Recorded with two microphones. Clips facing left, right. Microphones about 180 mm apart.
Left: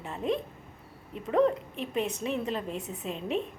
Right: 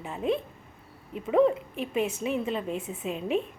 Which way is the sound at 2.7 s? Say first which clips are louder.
Right 3 dB; 40° left (ahead or behind).